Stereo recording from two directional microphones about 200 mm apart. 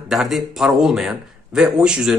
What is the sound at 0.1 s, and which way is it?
A man's voice, centre (ahead or behind).